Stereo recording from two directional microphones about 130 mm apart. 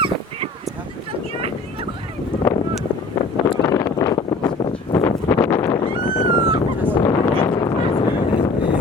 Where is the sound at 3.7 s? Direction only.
25° left (ahead or behind).